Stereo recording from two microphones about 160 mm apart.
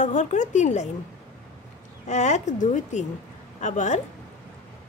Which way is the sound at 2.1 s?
45° left (ahead or behind).